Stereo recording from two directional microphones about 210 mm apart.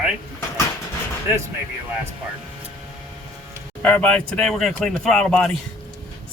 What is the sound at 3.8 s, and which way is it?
Speech, 10° left (ahead or behind).